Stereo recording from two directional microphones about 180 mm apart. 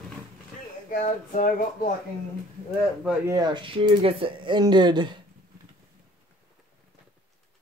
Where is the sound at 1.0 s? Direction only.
45° left (ahead or behind).